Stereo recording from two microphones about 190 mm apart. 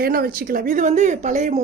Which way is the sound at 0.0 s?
50° right (ahead or behind).